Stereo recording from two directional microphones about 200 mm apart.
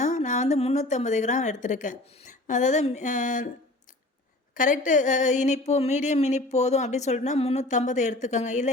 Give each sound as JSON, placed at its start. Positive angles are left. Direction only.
{"t": 0.0, "sound": "a woman's voice", "side_deg": 35}
{"t": 4.5, "sound": "speech", "side_deg": 40}